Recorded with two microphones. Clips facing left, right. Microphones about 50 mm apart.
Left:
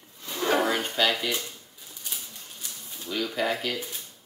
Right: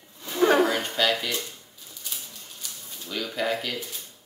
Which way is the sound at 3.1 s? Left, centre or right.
Centre.